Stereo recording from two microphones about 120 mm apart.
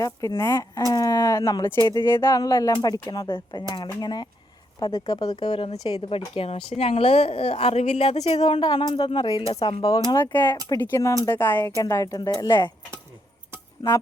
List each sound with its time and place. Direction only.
0.0 s speech: 25° left (ahead or behind)
0.9 s a sound: 30° left (ahead or behind)
1.9 s speech: 40° left (ahead or behind)
2.2 s speech: 30° left (ahead or behind); by 5.7 s 45° left (ahead or behind)
5.7 s speech: 35° left (ahead or behind)
6.0 s a woman's voice: 50° left (ahead or behind)
8.4 s speech: 40° left (ahead or behind)
10.3 s speech: 15° left (ahead or behind); by 12.5 s 35° left (ahead or behind)
13.8 s speech: 30° left (ahead or behind)